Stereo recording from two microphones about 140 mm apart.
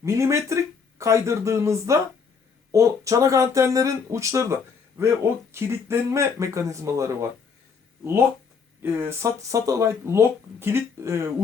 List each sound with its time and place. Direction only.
0.0 s speech: 20° right (ahead or behind)
8.8 s speech: 15° right (ahead or behind)